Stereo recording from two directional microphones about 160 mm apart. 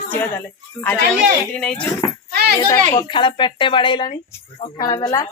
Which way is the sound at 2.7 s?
30° left (ahead or behind).